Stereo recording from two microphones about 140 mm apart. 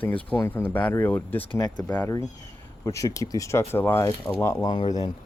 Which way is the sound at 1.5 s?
30° left (ahead or behind).